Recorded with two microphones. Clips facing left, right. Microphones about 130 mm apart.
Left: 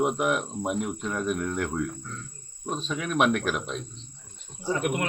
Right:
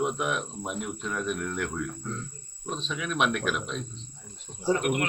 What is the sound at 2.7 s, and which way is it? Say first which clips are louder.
Speech: left 3 dB; 45° left (ahead or behind).